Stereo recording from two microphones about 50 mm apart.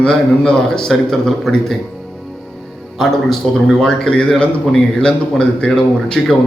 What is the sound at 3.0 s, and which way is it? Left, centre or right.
A man's voice, centre.